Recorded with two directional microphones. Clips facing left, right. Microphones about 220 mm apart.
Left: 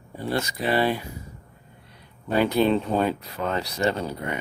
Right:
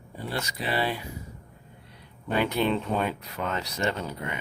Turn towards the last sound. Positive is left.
turn(degrees=35)  # may be behind; listen again after turning